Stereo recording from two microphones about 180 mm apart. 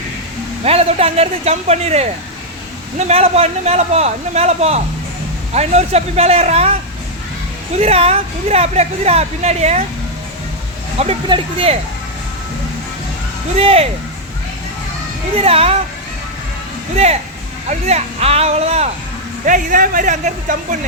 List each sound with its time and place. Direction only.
0.6 s a woman's voice: 35° right (ahead or behind)
3.1 s a woman's voice: 35° right (ahead or behind)
7.8 s a woman's voice: 35° right (ahead or behind)
10.9 s a woman's voice: 35° right (ahead or behind)
13.6 s a woman's voice: 30° right (ahead or behind)
15.4 s a woman's voice: 35° right (ahead or behind)
16.9 s a woman's voice: 35° right (ahead or behind)
19.5 s a man's voice: 50° right (ahead or behind)